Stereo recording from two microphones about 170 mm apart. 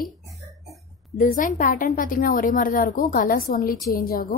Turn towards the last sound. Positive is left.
turn(degrees=55)  # may be behind; listen again after turning